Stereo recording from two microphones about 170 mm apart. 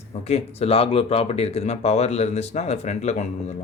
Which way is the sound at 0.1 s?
40° left (ahead or behind).